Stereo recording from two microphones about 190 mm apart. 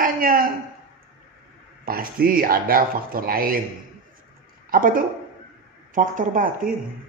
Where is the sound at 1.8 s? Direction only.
50° right (ahead or behind).